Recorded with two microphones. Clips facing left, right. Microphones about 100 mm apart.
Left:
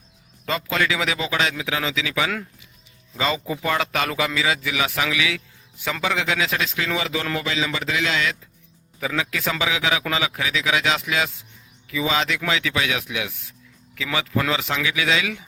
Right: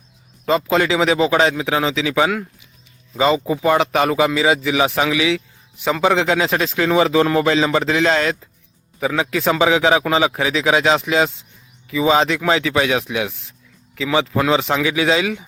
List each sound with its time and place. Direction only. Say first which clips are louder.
0.4 s a man's voice: right 7 dB; 25° right (ahead or behind)
9.0 s a man's voice: right 6 dB; 30° right (ahead or behind)